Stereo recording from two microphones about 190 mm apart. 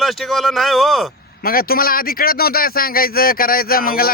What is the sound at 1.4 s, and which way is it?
A man's voice, 50° left (ahead or behind).